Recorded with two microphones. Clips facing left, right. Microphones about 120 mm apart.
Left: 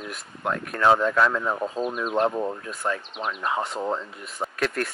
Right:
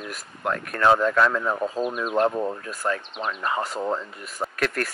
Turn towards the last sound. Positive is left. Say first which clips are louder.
# even
turn(degrees=0)  # may be behind; listen again after turning